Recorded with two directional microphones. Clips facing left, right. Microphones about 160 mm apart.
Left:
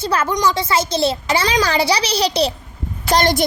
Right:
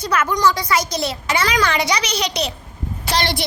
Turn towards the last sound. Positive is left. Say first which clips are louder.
# left 6 dB
turn(degrees=45)  # may be behind; listen again after turning